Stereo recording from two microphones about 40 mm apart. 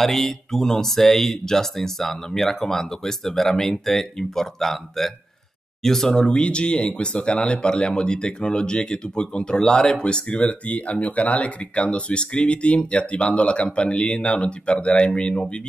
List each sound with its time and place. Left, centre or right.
0.0 s speech: centre
6.1 s speech: left